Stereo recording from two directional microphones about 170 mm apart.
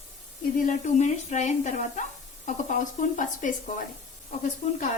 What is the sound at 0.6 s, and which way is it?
Speech, 45° left (ahead or behind).